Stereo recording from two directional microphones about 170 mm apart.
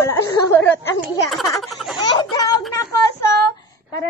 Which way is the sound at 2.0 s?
25° left (ahead or behind).